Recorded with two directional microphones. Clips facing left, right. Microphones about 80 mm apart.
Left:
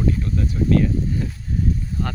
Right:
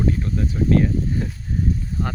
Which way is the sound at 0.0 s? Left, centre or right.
Right.